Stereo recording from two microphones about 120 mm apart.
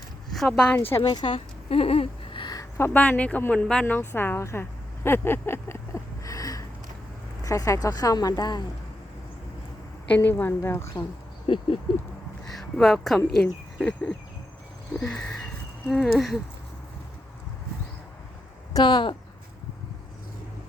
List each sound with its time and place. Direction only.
0.4 s speech: 10° left (ahead or behind)
1.0 s speech: 40° left (ahead or behind); by 2.4 s 55° left (ahead or behind)
2.4 s a sound: 35° left (ahead or behind)
2.7 s speech: 15° left (ahead or behind)
5.0 s a sound: 20° left (ahead or behind)
7.4 s a woman's voice: 30° left (ahead or behind)
10.1 s a woman's voice: 15° left (ahead or behind)
11.4 s a sound: 45° left (ahead or behind)
12.5 s speech: centre (ahead or behind)
18.7 s speech: 40° left (ahead or behind)